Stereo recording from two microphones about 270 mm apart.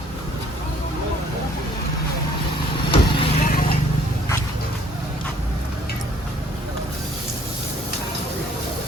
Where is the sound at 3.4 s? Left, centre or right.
Left.